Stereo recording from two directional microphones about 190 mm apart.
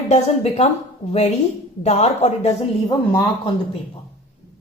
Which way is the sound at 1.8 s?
35° left (ahead or behind).